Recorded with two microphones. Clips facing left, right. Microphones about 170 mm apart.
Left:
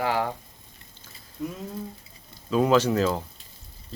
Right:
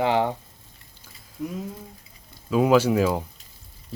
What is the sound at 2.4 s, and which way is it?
Speech, 5° right (ahead or behind).